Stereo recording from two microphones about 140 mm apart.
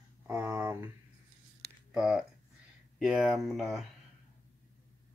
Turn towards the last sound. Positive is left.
turn(degrees=-5)  # may be behind; listen again after turning